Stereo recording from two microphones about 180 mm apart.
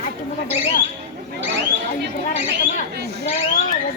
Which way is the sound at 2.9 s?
65° right (ahead or behind).